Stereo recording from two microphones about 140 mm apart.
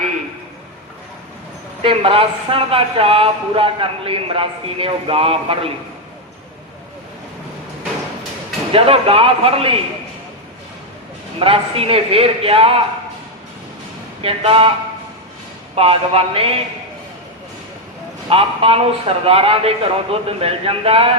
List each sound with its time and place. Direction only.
1.8 s speech: 40° right (ahead or behind)
8.7 s a man's voice: 40° right (ahead or behind)
11.3 s a man's voice: 40° right (ahead or behind)
14.2 s speech: 40° right (ahead or behind)
15.7 s a man's voice: 45° right (ahead or behind)
18.3 s a man's voice: 45° right (ahead or behind)